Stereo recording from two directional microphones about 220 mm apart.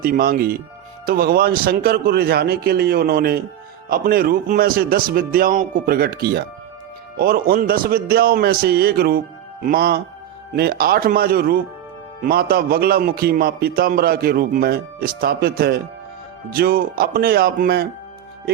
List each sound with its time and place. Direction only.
0.0 s a man's voice: 40° right (ahead or behind)